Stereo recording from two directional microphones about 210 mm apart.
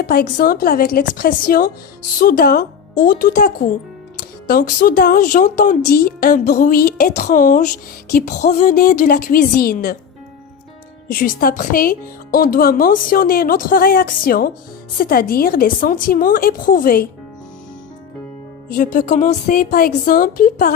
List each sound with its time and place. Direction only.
0.0 s a woman's voice: 45° left (ahead or behind)
11.1 s a woman's voice: 45° left (ahead or behind)
18.7 s a woman's voice: 40° left (ahead or behind)